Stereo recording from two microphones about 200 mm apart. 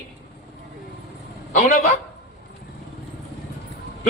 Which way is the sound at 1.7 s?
40° left (ahead or behind).